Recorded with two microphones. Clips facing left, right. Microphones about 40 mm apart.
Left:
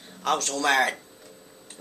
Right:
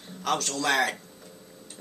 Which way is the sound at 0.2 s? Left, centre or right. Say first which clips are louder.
Left 3 dB; centre.